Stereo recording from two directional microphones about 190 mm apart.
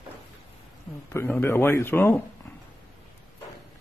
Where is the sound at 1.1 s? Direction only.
10° left (ahead or behind).